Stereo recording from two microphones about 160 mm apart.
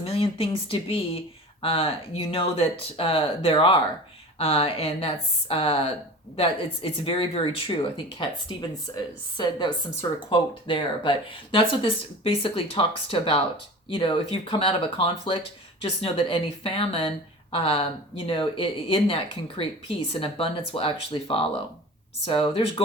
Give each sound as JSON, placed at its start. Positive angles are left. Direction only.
{"t": 0.0, "sound": "a woman's voice", "side_deg": 35}